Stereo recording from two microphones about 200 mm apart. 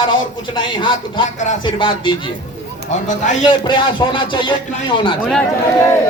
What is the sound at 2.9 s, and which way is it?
Speech, 40° left (ahead or behind).